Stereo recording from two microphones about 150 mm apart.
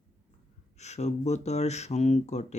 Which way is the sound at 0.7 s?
50° left (ahead or behind).